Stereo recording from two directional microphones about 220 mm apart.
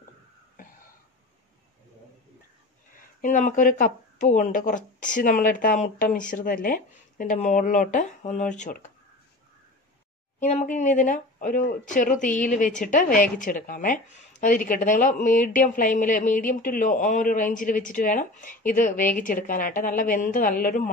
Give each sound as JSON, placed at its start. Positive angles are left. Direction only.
{"t": 3.2, "sound": "a woman's voice", "side_deg": 35}
{"t": 10.4, "sound": "a woman's voice", "side_deg": 30}